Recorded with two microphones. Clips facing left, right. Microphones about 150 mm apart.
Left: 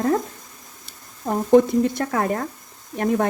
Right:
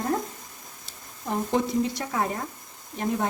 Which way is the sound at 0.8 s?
55° left (ahead or behind).